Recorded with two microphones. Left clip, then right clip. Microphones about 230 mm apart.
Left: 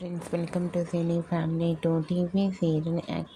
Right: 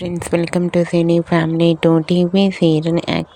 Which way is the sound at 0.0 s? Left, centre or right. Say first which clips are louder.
Right 14 dB; right.